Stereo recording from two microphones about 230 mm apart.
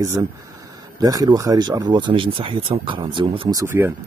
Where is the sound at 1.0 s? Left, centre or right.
Centre.